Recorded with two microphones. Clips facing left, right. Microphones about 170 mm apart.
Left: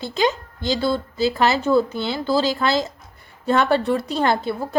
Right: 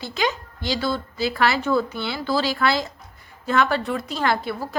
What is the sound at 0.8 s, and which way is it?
A woman's voice, 25° left (ahead or behind).